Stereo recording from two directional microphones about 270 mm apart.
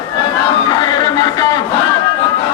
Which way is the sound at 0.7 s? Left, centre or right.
Centre.